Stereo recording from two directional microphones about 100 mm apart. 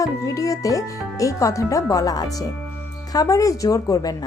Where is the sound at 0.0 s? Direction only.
35° left (ahead or behind).